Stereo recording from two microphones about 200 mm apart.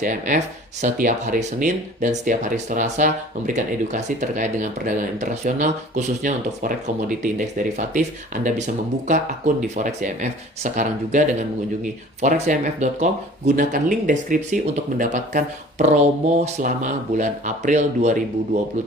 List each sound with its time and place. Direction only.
0.0 s speech: 40° right (ahead or behind)
8.4 s speech: 40° right (ahead or behind)